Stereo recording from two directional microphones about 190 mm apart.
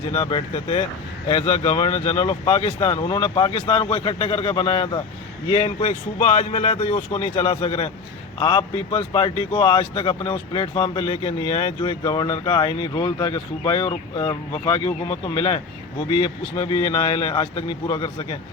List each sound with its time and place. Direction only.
0.1 s a man's voice: 25° left (ahead or behind)